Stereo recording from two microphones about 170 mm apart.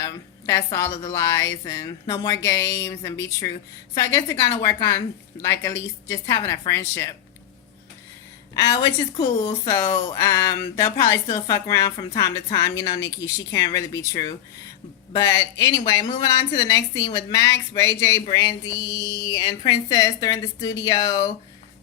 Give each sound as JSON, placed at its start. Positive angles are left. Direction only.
{"t": 0.0, "sound": "a sound", "side_deg": 20}
{"t": 0.8, "sound": "a woman's voice", "side_deg": 15}
{"t": 8.5, "sound": "speech", "side_deg": 20}